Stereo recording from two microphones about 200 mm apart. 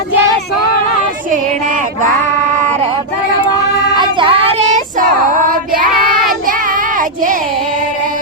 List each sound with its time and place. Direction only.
3.9 s child singing: 25° right (ahead or behind)
5.5 s child singing: 45° right (ahead or behind)